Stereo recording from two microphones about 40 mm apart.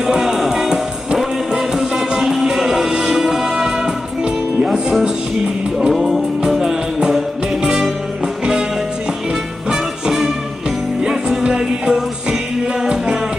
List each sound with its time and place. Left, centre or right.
0.0 s music: centre
5.8 s music: centre
9.7 s music: centre